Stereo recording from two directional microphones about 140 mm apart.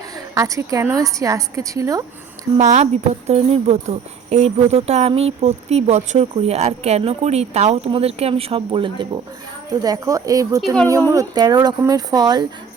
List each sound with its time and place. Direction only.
0.3 s a woman's voice: 25° right (ahead or behind)
2.6 s speech: 55° right (ahead or behind); by 9.0 s 40° right (ahead or behind)
9.8 s a woman's voice: 25° right (ahead or behind)